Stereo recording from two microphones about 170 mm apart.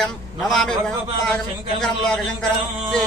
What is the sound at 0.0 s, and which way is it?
Speech, centre (ahead or behind).